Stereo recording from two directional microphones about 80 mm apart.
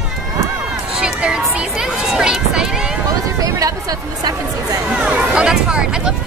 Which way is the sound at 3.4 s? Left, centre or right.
Right.